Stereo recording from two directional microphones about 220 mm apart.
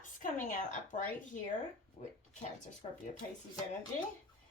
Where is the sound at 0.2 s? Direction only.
35° left (ahead or behind).